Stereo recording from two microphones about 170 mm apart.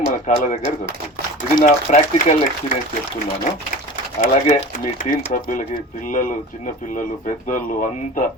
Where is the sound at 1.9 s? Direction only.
45° left (ahead or behind).